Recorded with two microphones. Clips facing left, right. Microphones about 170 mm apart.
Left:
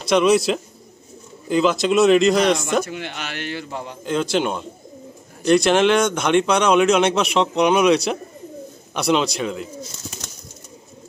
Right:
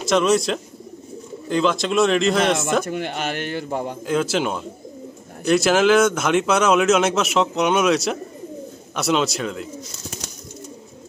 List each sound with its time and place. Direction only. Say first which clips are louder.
0.1 s speech: left 2 dB; centre (ahead or behind)
2.8 s a man's voice: right 3 dB; 50° right (ahead or behind)
4.0 s speech: left 2 dB; 5° right (ahead or behind)